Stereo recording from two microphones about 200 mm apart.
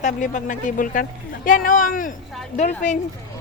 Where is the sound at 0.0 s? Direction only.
40° left (ahead or behind).